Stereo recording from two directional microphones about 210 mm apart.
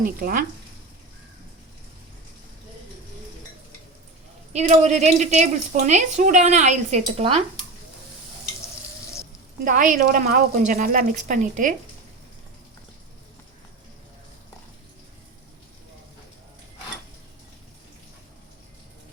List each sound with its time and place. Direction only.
0.0 s speech: 45° right (ahead or behind)
4.5 s a woman's voice: 35° right (ahead or behind)
9.6 s a woman's voice: 40° right (ahead or behind)